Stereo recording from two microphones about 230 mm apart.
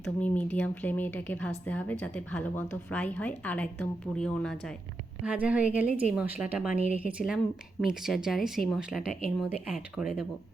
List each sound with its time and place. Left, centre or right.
0.2 s a woman's voice: centre